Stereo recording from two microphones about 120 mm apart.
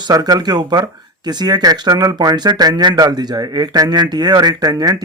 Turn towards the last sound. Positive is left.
turn(degrees=-35)  # may be behind; listen again after turning